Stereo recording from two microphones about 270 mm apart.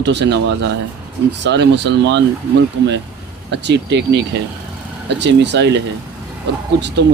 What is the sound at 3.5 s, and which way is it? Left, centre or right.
Speech, right.